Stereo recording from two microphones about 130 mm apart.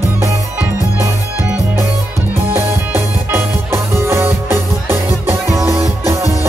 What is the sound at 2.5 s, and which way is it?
Music, 20° right (ahead or behind).